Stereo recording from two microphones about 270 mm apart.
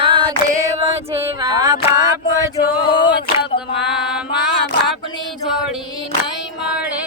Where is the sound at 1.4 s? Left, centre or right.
Centre.